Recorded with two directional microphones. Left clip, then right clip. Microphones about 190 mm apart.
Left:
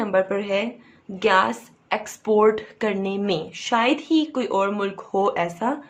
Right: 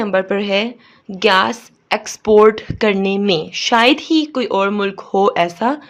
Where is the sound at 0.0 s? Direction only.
45° right (ahead or behind).